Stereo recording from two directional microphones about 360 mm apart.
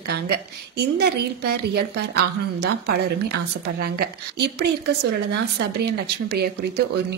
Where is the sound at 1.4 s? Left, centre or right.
Right.